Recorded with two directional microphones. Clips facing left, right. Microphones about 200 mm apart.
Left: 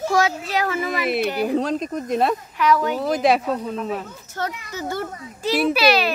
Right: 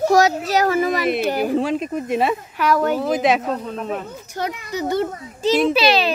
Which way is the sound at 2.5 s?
45° right (ahead or behind).